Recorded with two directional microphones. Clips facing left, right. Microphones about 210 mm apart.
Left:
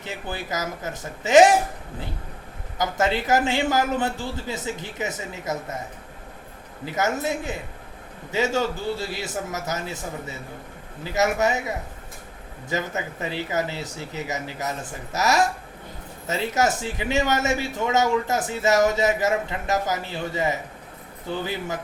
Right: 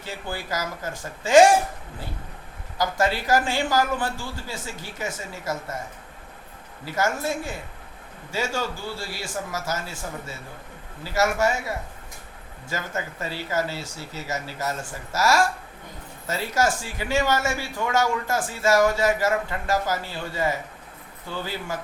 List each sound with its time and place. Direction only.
0.0 s speech: 20° left (ahead or behind)
2.7 s speech: 20° left (ahead or behind)
6.8 s speech: 20° left (ahead or behind)